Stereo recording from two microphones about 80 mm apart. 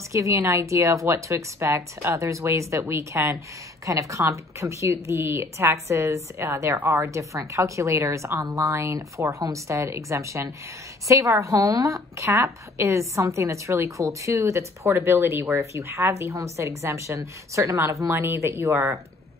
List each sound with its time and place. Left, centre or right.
0.1 s a woman's voice: right